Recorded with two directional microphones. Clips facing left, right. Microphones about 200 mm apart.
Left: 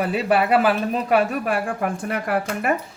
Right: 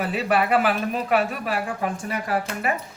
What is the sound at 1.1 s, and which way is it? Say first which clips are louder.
Speech: left 4 dB; 50° left (ahead or behind).